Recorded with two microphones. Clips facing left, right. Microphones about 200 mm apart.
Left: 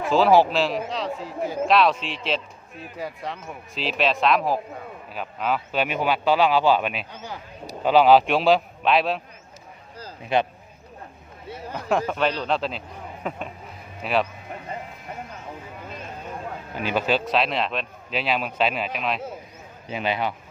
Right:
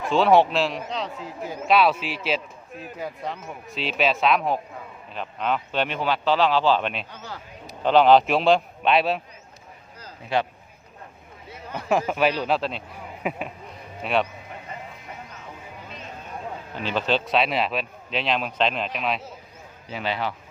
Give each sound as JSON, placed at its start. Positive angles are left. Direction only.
{"t": 0.1, "sound": "a man's voice", "side_deg": 0}
{"t": 10.3, "sound": "speech", "side_deg": 20}
{"t": 11.7, "sound": "a man's voice", "side_deg": -5}
{"t": 16.7, "sound": "a man's voice", "side_deg": 10}
{"t": 19.9, "sound": "speech", "side_deg": 15}